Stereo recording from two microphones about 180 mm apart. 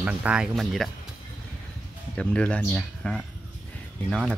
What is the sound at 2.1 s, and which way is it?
Speech, 5° left (ahead or behind).